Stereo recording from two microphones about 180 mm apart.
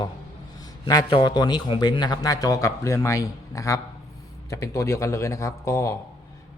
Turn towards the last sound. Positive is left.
turn(degrees=15)  # may be behind; listen again after turning